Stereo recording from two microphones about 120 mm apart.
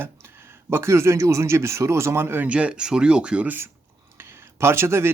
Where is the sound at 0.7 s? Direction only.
20° right (ahead or behind).